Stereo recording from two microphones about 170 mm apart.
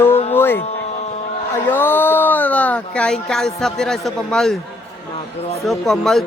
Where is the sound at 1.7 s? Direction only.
10° left (ahead or behind).